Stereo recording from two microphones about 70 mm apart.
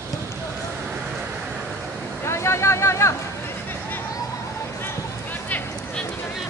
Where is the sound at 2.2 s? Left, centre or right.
Left.